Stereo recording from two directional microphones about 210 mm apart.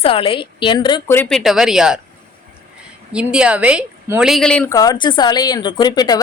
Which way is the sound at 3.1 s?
5° right (ahead or behind).